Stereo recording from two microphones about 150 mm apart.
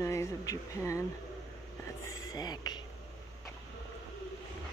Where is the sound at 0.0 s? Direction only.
20° left (ahead or behind).